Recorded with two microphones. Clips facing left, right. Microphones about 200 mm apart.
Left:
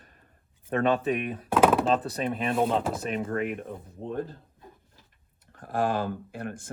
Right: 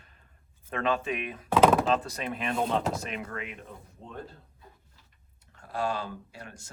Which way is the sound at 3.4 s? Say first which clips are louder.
Left 10 dB; 50° left (ahead or behind).